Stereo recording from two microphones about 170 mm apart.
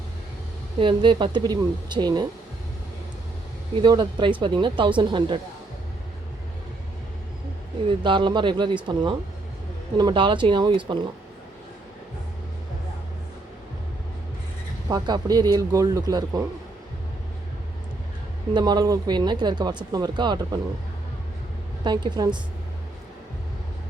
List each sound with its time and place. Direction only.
0.8 s speech: 30° right (ahead or behind)
3.8 s speech: 25° right (ahead or behind)
7.9 s speech: 30° right (ahead or behind)
14.8 s speech: 25° right (ahead or behind)
18.5 s speech: 25° right (ahead or behind)
21.8 s speech: 25° right (ahead or behind)